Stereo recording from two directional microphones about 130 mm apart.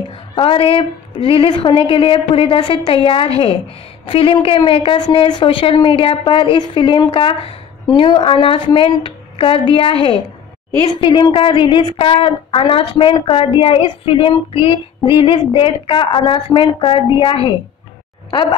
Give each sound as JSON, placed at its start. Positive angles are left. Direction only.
{"t": 0.4, "sound": "a woman's voice", "side_deg": 45}